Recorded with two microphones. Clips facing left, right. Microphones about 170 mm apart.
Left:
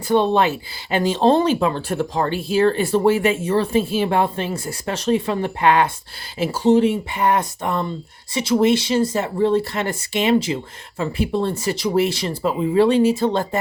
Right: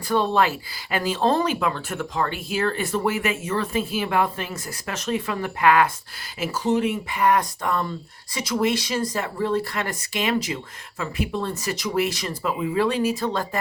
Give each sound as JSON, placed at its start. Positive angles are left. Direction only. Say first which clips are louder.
{"t": 0.1, "sound": "speech", "louder": "left 4 dB", "side_deg": 25}